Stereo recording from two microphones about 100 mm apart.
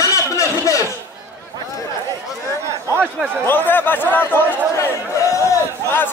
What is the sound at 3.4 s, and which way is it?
A man's voice, 20° left (ahead or behind).